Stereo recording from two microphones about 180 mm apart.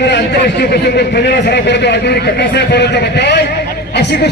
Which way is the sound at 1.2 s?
70° left (ahead or behind).